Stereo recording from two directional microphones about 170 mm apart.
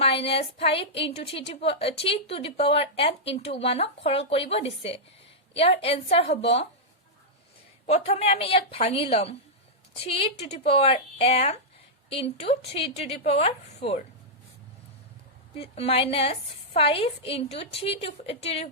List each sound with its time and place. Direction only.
0.0 s speech: 35° left (ahead or behind)
7.9 s speech: 35° left (ahead or behind)
15.5 s speech: 35° left (ahead or behind)